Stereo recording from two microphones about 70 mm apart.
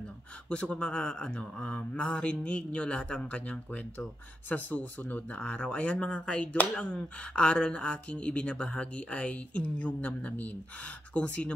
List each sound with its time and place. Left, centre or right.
0.5 s speech: centre